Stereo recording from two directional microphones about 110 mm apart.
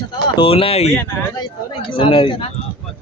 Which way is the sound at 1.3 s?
50° left (ahead or behind).